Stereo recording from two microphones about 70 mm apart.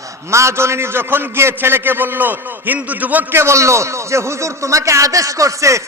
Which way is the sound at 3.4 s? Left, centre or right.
Right.